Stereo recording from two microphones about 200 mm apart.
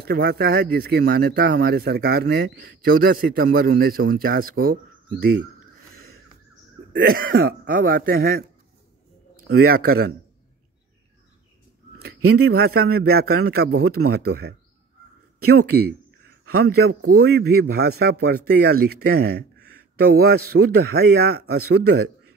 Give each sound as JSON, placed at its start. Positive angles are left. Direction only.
{"t": 0.0, "sound": "speech", "side_deg": -50}
{"t": 6.9, "sound": "speech", "side_deg": -50}
{"t": 9.5, "sound": "speech", "side_deg": -50}
{"t": 12.4, "sound": "speech", "side_deg": -50}